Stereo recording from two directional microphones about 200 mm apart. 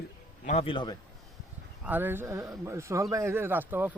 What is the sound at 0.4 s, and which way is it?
Speech, 30° left (ahead or behind).